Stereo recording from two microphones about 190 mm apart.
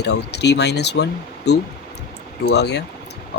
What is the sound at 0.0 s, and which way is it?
Speech, 60° left (ahead or behind).